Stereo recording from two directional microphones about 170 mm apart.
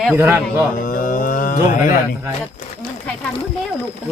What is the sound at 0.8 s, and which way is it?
Speech, 50° left (ahead or behind).